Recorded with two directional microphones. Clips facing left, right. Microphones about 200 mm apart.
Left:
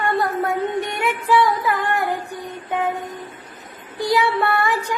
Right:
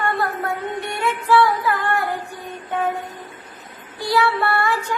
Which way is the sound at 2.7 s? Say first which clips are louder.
Even; 15° left (ahead or behind).